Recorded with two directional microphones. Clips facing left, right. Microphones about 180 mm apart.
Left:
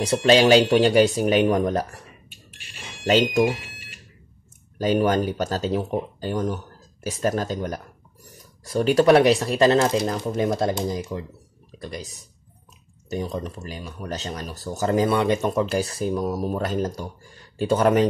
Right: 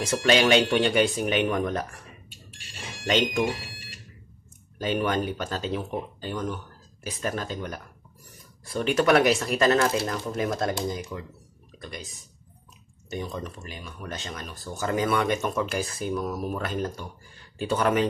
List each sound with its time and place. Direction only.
0.0 s speech: 30° left (ahead or behind)
3.1 s speech: 35° left (ahead or behind)
4.7 s speech: 40° left (ahead or behind)
13.1 s speech: 35° left (ahead or behind)